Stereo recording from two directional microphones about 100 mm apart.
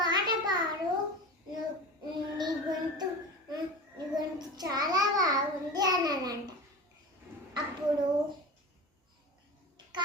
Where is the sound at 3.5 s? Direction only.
40° right (ahead or behind).